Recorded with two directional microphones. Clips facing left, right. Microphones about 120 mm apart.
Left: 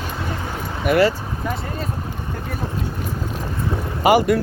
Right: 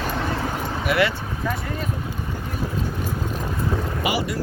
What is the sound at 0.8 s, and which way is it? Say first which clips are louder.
Speech: left 5 dB; 45° left (ahead or behind).